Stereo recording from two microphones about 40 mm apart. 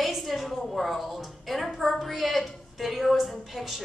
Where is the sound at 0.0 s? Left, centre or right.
Centre.